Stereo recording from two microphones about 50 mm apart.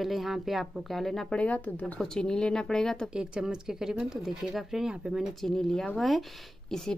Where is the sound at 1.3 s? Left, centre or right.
Left.